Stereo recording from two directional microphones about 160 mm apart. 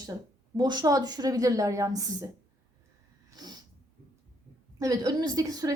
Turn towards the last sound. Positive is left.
turn(degrees=-25)  # may be behind; listen again after turning